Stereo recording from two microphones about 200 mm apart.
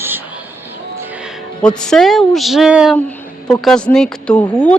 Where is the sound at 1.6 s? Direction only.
5° left (ahead or behind).